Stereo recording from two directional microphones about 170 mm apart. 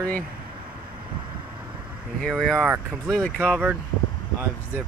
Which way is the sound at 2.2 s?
5° left (ahead or behind).